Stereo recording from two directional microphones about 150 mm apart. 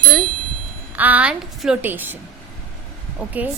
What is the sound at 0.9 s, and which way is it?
A woman's voice, 10° right (ahead or behind).